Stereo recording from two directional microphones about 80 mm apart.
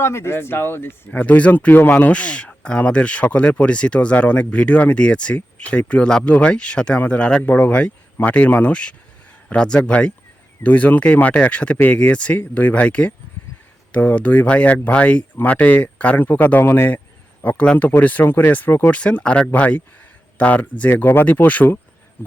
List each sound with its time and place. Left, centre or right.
0.0 s speech: left; by 13.1 s centre
13.4 s a sound: centre
13.9 s speech: centre
17.4 s speech: centre